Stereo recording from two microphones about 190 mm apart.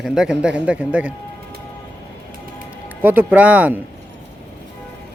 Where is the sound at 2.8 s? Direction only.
10° right (ahead or behind).